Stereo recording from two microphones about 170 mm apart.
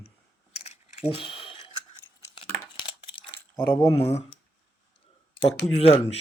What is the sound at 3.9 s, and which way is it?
Speech, 35° left (ahead or behind).